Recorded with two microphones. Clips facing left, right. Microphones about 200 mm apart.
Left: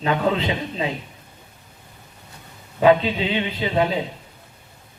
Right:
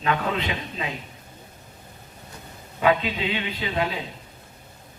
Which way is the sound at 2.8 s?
30° left (ahead or behind).